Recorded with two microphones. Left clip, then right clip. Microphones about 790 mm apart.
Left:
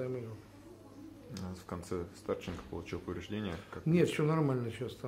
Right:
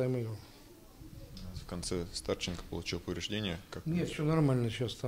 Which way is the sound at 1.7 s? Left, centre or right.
Centre.